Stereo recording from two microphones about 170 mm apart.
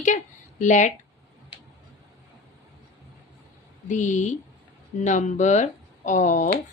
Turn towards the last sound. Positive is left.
turn(degrees=45)  # may be behind; listen again after turning